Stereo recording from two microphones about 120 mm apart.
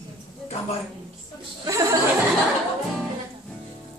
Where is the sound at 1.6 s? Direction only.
25° right (ahead or behind).